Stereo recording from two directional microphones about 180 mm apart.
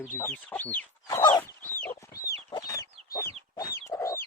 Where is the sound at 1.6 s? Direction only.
10° left (ahead or behind).